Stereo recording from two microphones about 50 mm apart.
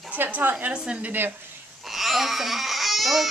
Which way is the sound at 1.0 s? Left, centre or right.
Right.